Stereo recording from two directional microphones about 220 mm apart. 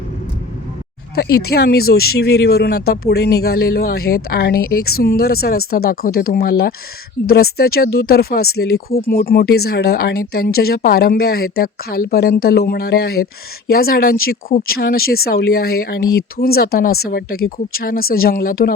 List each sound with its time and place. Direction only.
1.1 s speech: 45° left (ahead or behind)